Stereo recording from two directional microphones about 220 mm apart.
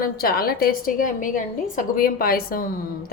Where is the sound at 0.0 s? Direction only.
40° left (ahead or behind).